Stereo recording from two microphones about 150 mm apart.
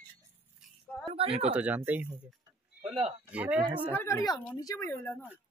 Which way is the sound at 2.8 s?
35° right (ahead or behind).